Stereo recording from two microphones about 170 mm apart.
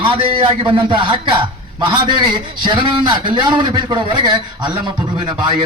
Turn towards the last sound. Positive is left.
turn(degrees=-25)  # may be behind; listen again after turning